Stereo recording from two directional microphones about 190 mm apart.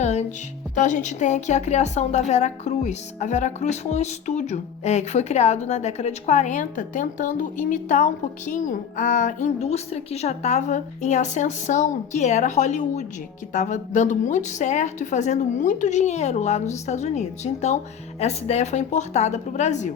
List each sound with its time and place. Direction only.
0.0 s music: 35° left (ahead or behind)
0.8 s a woman's voice: 40° left (ahead or behind)